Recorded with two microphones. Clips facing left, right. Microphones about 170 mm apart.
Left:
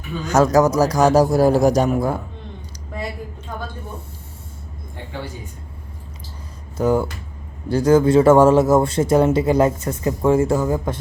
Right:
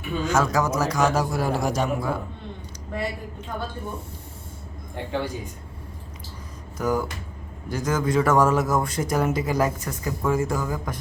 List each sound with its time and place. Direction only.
0.3 s a man's voice: 40° left (ahead or behind)
6.7 s a man's voice: 30° left (ahead or behind)